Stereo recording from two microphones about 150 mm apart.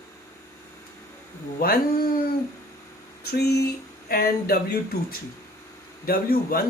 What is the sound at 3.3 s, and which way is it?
Speech, 90° left.